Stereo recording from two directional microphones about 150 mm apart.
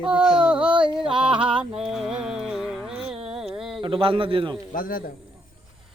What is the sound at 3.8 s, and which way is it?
Speech, 35° right (ahead or behind).